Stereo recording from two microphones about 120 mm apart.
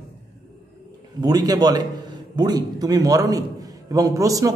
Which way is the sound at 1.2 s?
30° right (ahead or behind).